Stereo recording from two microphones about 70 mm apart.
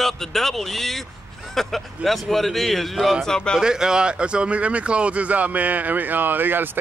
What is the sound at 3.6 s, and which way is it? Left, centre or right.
Speech, centre.